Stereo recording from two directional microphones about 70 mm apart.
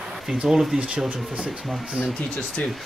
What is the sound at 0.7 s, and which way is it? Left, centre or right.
Speech, centre.